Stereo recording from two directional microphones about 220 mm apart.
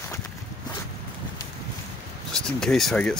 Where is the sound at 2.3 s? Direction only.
5° left (ahead or behind).